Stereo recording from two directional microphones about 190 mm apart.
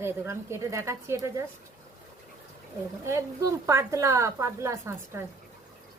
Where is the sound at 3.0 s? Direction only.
15° right (ahead or behind).